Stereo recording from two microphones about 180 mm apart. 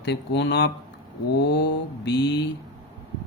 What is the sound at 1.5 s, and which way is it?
Speech, 70° left (ahead or behind).